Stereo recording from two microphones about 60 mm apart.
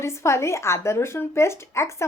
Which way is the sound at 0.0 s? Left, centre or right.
Left.